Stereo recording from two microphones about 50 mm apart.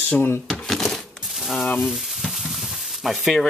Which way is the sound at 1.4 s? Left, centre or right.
Centre.